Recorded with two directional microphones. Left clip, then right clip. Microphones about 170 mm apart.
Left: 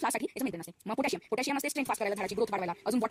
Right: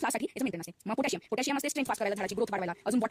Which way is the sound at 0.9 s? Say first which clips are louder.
Even; 45° right (ahead or behind).